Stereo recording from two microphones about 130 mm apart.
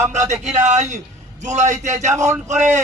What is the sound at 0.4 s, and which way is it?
A man's voice, 60° right (ahead or behind).